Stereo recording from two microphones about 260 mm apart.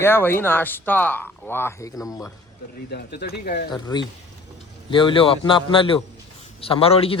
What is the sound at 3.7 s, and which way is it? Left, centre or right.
A man's voice, centre.